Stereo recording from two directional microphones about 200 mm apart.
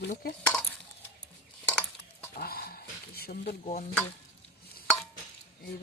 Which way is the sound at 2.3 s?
50° left (ahead or behind).